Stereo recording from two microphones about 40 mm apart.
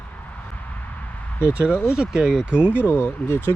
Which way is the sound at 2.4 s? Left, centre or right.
Right.